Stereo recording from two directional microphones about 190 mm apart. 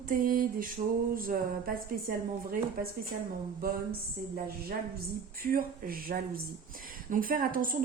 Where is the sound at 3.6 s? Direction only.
50° right (ahead or behind).